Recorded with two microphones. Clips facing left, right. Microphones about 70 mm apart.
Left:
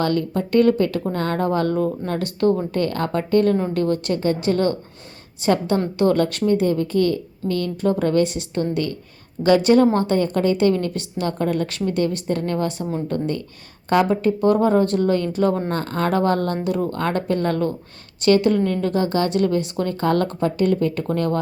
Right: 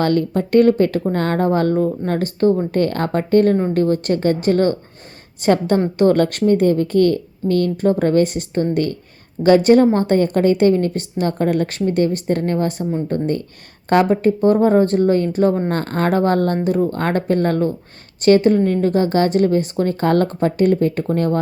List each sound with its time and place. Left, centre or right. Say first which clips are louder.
0.0 s a woman's voice: right 4 dB; right